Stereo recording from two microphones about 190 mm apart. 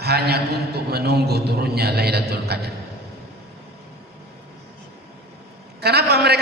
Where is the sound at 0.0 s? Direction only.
55° right (ahead or behind).